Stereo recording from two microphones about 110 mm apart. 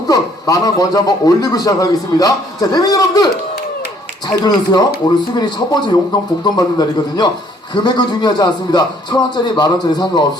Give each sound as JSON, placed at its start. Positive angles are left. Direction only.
{"t": 0.1, "sound": "a man's voice", "side_deg": 35}
{"t": 4.3, "sound": "a man's voice", "side_deg": 40}